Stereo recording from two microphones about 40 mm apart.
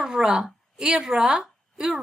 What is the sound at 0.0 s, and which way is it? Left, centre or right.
A woman's voice, centre.